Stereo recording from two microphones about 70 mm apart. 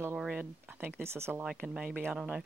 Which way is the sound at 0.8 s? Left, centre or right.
Right.